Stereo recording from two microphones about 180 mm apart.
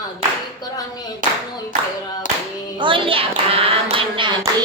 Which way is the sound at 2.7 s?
30° right (ahead or behind).